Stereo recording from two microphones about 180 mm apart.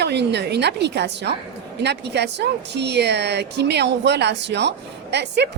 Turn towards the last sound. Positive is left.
turn(degrees=-70)  # may be behind; listen again after turning